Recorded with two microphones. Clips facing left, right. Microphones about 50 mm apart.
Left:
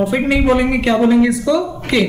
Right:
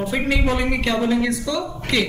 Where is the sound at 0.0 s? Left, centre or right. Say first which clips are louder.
Left 6 dB; centre.